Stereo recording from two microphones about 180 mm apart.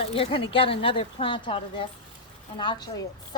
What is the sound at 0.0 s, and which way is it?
A woman's voice, 30° left (ahead or behind).